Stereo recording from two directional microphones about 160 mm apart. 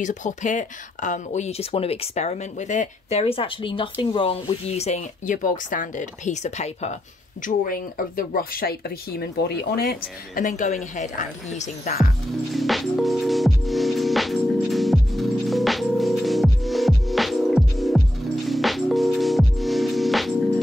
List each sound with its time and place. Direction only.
0.0 s speech: 50° left (ahead or behind)
7.4 s speech: 60° left (ahead or behind); by 10.4 s 80° left
10.4 s speech: 50° left (ahead or behind)
12.5 s music: centre (ahead or behind)